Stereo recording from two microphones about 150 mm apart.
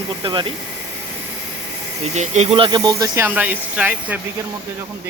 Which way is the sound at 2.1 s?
50° right (ahead or behind).